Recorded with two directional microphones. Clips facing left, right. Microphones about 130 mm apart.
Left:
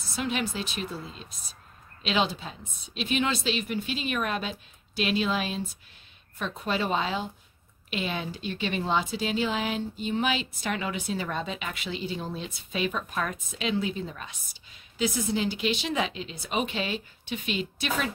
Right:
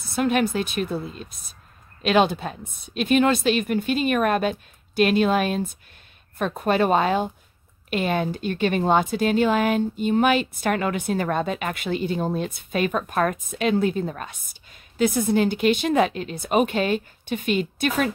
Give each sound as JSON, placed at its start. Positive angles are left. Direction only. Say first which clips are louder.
{"t": 0.1, "sound": "a woman's voice", "louder": "right 9 dB", "side_deg": -55}